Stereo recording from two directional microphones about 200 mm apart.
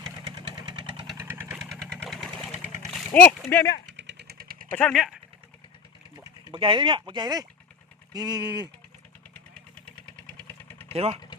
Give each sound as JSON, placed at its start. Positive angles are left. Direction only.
{"t": 0.3, "sound": "vehicle", "side_deg": -20}
{"t": 1.2, "sound": "vehicle", "side_deg": -10}
{"t": 3.9, "sound": "vehicle", "side_deg": -60}
{"t": 4.7, "sound": "speech", "side_deg": 5}
{"t": 6.5, "sound": "speech", "side_deg": -25}
{"t": 10.7, "sound": "vehicle", "side_deg": 10}
{"t": 10.9, "sound": "speech", "side_deg": -30}